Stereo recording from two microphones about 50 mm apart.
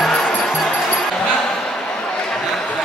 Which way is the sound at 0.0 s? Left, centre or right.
Centre.